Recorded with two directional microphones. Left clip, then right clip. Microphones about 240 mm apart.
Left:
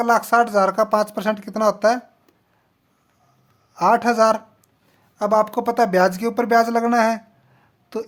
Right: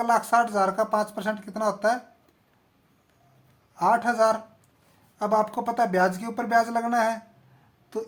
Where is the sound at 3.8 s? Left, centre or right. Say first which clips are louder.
Left 5 dB; left.